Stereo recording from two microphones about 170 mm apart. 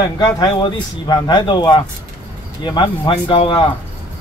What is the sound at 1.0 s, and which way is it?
Speech, 25° left (ahead or behind).